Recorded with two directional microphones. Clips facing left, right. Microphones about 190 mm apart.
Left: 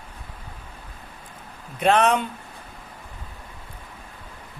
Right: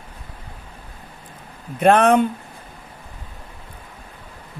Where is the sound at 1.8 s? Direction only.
50° right (ahead or behind).